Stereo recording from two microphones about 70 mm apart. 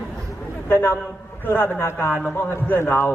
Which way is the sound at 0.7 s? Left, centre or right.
Left.